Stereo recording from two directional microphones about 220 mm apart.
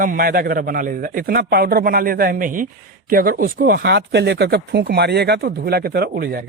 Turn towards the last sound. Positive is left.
turn(degrees=-45)  # may be behind; listen again after turning